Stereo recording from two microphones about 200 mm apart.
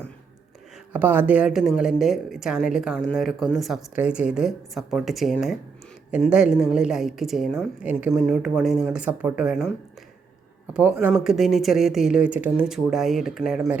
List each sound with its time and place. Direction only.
0.9 s a woman's voice: 10° right (ahead or behind)
10.8 s a woman's voice: 10° right (ahead or behind)